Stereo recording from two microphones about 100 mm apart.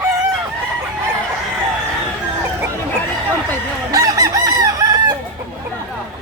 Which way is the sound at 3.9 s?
35° right (ahead or behind).